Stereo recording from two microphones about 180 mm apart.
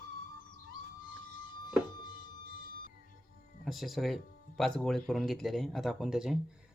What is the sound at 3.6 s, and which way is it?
Speech, centre (ahead or behind).